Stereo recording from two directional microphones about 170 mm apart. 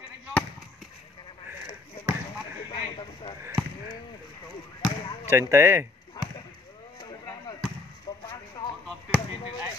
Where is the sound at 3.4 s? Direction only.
20° right (ahead or behind).